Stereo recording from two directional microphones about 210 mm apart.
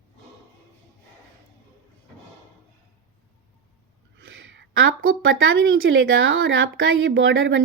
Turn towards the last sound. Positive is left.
turn(degrees=-65)  # may be behind; listen again after turning